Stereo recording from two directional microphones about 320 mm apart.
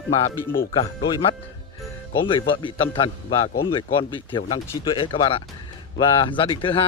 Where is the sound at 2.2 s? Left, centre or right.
Centre.